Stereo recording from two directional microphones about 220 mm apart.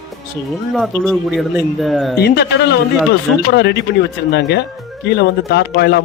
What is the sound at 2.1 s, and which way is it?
Speech, 45° left (ahead or behind).